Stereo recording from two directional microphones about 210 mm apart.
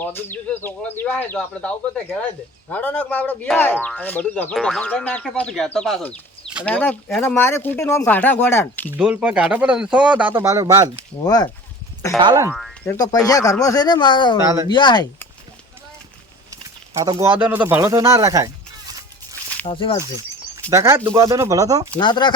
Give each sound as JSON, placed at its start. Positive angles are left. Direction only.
{"t": 0.0, "sound": "speech", "side_deg": 10}
{"t": 8.9, "sound": "speech", "side_deg": -5}
{"t": 11.2, "sound": "speech", "side_deg": 20}
{"t": 12.2, "sound": "speech", "side_deg": -15}
{"t": 12.5, "sound": "speech", "side_deg": 5}
{"t": 14.4, "sound": "speech", "side_deg": -15}
{"t": 14.7, "sound": "speech", "side_deg": 20}
{"t": 16.5, "sound": "bird", "side_deg": -15}
{"t": 19.6, "sound": "speech", "side_deg": 25}
{"t": 20.7, "sound": "speech", "side_deg": -15}
{"t": 21.9, "sound": "speech", "side_deg": 20}